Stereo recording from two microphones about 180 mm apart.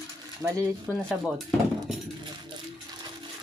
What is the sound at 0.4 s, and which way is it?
Speech, 15° right (ahead or behind).